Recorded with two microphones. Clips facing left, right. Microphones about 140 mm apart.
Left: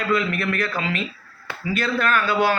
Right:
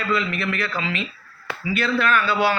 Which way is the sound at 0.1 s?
45° left (ahead or behind).